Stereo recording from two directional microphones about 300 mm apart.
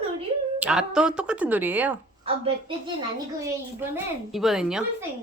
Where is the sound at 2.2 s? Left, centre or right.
Centre.